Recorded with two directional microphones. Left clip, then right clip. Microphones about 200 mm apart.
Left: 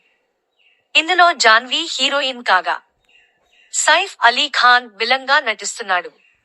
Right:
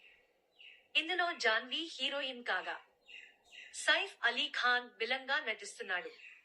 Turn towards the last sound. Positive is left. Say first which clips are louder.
# left 19 dB
turn(degrees=55)  # may be behind; listen again after turning